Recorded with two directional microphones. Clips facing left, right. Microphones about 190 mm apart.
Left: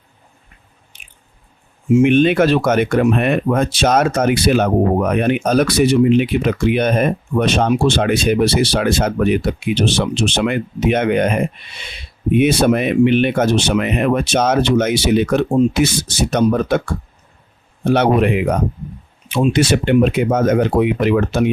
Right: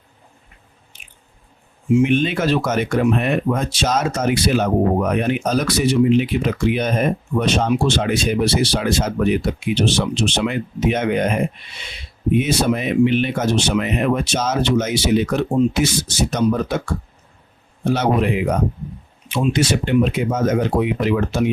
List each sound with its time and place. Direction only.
1.9 s speech: 55° left (ahead or behind)
12.3 s speech: 65° left (ahead or behind)
19.7 s speech: 65° left (ahead or behind)